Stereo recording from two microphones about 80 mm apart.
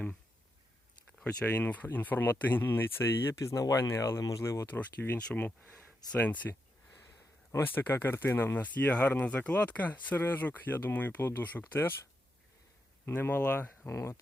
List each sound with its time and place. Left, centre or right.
1.2 s speech: centre; by 3.3 s left
3.3 s speech: left
4.6 s speech: left
6.5 s a sound: left
7.5 s speech: left
13.1 s speech: left
13.9 s speech: left